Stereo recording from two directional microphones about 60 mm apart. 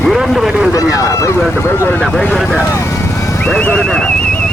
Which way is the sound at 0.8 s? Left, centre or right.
Left.